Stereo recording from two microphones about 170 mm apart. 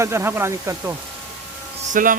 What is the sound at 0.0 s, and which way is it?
Speech, 15° right (ahead or behind).